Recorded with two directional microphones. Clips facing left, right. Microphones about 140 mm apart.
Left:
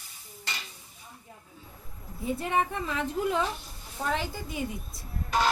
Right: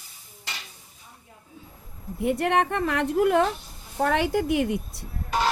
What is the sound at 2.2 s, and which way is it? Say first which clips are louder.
A woman's voice: right 6 dB; 70° right (ahead or behind).